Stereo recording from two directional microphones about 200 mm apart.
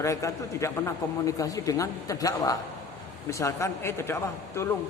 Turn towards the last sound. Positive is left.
turn(degrees=15)  # may be behind; listen again after turning